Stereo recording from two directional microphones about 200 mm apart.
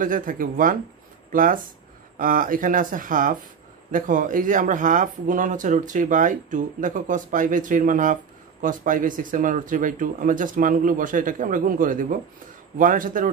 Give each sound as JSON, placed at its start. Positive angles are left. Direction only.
{"t": 0.0, "sound": "speech", "side_deg": -40}